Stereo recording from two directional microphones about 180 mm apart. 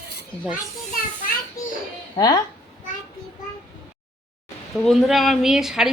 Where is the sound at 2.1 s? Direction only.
20° left (ahead or behind).